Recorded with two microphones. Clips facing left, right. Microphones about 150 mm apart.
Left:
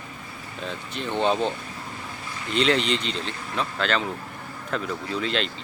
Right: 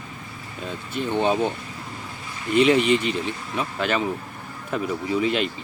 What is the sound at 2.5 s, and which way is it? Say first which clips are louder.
Speech: right 5 dB; 10° right (ahead or behind).